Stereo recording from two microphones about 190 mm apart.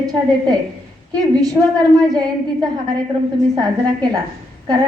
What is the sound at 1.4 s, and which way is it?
Speech, 20° right (ahead or behind).